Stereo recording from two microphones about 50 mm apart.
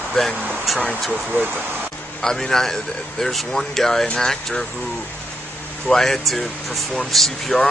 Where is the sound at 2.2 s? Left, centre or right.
Centre.